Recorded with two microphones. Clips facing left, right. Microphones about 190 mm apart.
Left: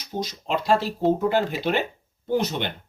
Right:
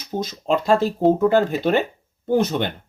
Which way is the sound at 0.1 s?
50° right (ahead or behind).